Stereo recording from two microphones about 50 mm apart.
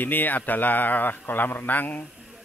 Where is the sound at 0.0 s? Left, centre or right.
Left.